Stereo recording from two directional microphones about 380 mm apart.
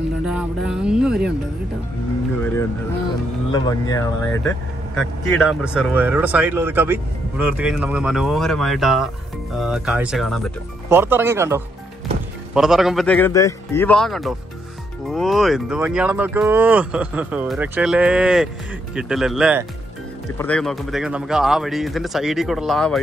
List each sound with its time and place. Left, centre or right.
0.2 s speech: centre
3.5 s speech: centre